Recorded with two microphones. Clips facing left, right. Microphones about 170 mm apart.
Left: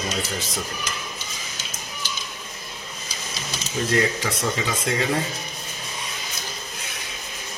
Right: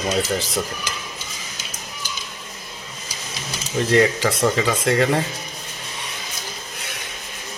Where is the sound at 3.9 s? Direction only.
85° right.